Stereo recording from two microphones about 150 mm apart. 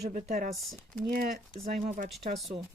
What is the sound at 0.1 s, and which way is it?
Speech, 50° right (ahead or behind).